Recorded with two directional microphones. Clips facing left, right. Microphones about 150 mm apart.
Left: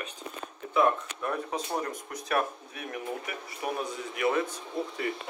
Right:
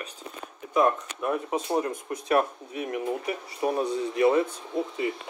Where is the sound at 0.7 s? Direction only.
20° right (ahead or behind).